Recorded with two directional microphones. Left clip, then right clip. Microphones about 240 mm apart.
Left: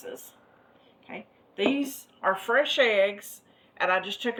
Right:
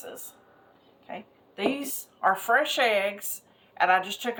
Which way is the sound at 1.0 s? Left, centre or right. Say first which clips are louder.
Right 2 dB; centre.